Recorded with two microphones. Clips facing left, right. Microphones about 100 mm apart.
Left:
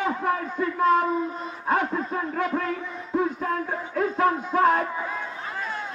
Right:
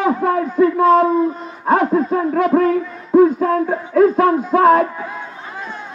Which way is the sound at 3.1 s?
70° right (ahead or behind).